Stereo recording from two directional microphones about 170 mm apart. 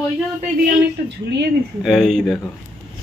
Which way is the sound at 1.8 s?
Centre (ahead or behind).